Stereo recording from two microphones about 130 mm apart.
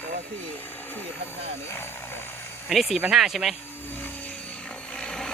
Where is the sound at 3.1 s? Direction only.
Centre (ahead or behind).